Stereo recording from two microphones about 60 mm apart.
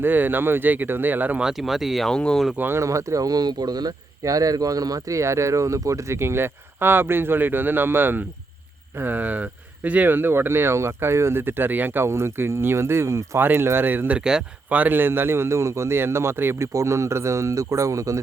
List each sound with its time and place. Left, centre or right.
0.0 s speech: right
1.4 s speech: centre
2.0 s speech: centre
2.7 s speech: right
6.1 s speech: right
13.4 s speech: right
14.1 s speech: centre
14.7 s a man's voice: right
16.7 s speech: right